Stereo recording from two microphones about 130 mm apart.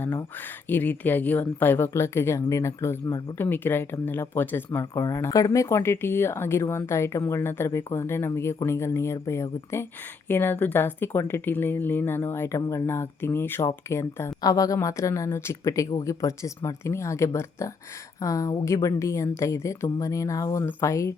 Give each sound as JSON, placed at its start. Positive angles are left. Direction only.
{"t": 0.3, "sound": "speech", "side_deg": 15}